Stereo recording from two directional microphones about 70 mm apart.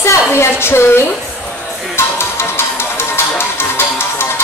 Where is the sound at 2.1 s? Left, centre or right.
Left.